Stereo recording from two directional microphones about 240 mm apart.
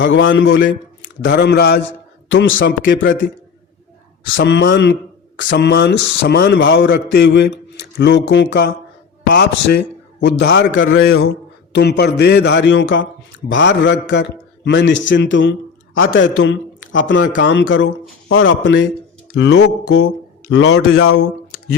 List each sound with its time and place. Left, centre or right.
0.0 s a man's voice: left
2.3 s a man's voice: left
4.4 s a man's voice: left